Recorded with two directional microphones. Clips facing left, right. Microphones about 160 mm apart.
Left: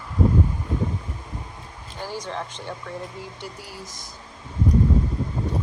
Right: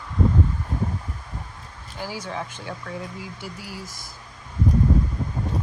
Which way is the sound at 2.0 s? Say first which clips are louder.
Even; 5° right (ahead or behind).